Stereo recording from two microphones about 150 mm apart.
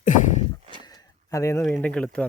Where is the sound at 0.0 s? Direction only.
55° left (ahead or behind).